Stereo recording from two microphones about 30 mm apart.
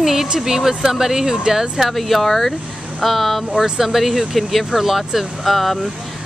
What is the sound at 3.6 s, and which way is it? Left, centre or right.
Speech, centre.